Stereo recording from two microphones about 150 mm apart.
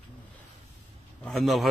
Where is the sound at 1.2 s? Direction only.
Centre (ahead or behind).